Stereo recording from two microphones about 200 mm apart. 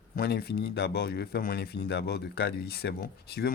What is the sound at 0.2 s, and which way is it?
Speech, 55° left (ahead or behind).